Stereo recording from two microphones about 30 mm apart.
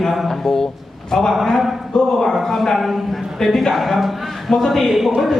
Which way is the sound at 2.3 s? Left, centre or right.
Centre.